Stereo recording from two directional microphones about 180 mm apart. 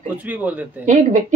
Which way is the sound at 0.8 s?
45° right (ahead or behind).